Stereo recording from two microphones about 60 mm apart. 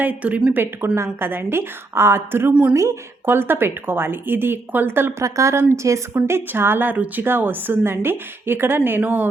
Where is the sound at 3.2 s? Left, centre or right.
Right.